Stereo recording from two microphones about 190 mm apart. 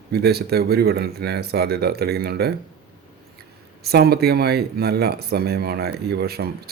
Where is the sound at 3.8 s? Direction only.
55° right (ahead or behind).